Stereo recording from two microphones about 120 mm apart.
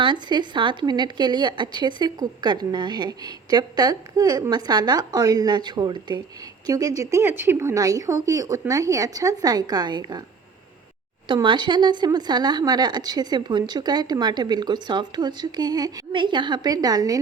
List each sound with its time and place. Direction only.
0.0 s speech: 40° right (ahead or behind)
11.4 s speech: 40° right (ahead or behind)